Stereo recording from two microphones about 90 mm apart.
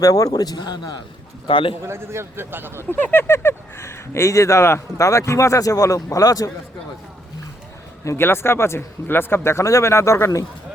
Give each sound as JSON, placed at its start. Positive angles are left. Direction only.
{"t": 0.0, "sound": "a man's voice", "side_deg": 40}
{"t": 1.5, "sound": "a man's voice", "side_deg": 75}
{"t": 1.8, "sound": "speech", "side_deg": -30}
{"t": 2.9, "sound": "speech", "side_deg": 20}
{"t": 8.0, "sound": "speech", "side_deg": 25}